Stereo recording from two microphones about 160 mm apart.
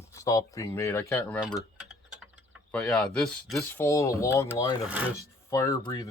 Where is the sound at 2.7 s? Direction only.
5° left (ahead or behind).